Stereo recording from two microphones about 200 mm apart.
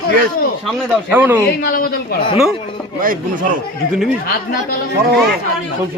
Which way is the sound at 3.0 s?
45° right (ahead or behind).